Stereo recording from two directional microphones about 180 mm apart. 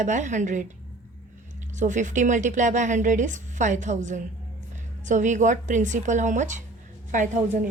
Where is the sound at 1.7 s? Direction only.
45° right (ahead or behind).